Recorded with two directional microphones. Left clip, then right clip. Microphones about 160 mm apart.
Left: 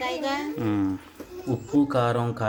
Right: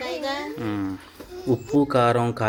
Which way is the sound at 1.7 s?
15° right (ahead or behind).